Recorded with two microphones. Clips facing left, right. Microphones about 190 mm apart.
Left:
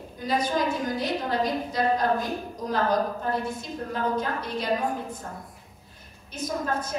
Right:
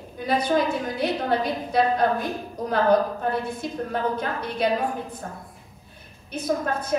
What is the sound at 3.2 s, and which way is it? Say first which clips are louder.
Speech: right 2 dB; 65° right (ahead or behind).